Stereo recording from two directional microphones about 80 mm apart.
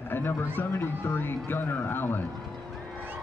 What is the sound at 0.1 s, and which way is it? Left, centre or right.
Speech, left.